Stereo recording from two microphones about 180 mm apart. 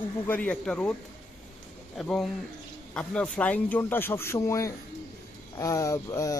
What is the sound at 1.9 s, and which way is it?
Speech, centre (ahead or behind).